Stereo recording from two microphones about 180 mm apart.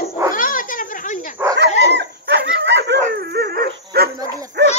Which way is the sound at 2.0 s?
70° right (ahead or behind).